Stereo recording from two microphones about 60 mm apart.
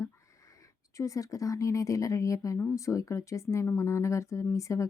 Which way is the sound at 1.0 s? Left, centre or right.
Left.